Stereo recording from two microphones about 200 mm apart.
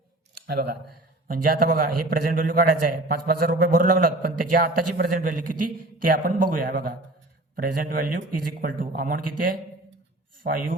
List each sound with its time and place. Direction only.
0.3 s a man's voice: 50° right (ahead or behind)